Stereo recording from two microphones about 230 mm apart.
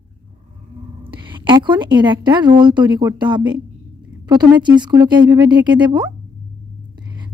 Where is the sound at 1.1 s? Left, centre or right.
Right.